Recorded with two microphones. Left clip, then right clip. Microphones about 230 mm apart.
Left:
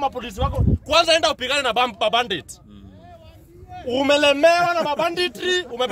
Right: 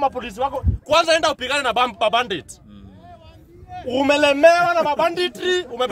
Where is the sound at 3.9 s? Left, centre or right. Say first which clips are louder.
Even; centre.